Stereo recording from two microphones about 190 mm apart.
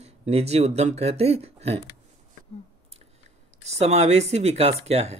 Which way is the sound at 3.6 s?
35° right (ahead or behind).